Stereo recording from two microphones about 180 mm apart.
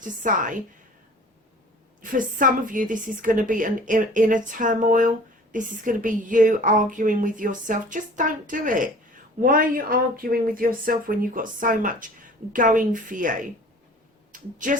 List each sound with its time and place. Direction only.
0.0 s a woman's voice: 45° right (ahead or behind)
2.0 s a woman's voice: 50° right (ahead or behind)